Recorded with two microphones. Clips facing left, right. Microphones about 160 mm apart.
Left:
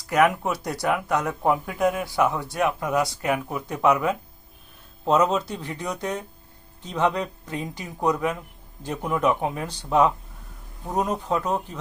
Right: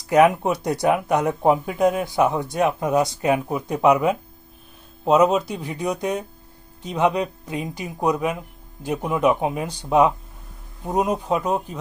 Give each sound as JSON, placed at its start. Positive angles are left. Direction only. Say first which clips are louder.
{"t": 0.1, "sound": "speech", "louder": "right 5 dB", "side_deg": -20}